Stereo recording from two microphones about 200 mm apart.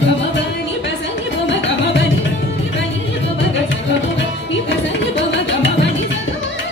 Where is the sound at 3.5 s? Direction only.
65° left (ahead or behind).